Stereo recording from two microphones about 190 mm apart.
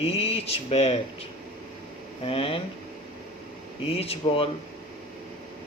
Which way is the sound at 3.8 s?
30° left (ahead or behind).